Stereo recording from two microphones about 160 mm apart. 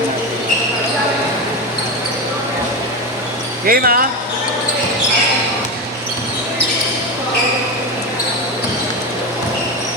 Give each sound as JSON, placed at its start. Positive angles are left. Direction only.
{"t": 3.7, "sound": "speech", "side_deg": -70}